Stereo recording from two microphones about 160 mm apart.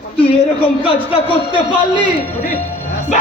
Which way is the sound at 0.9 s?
35° left (ahead or behind).